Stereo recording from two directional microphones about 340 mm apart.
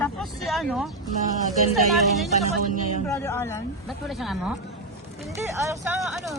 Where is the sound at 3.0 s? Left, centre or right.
Centre.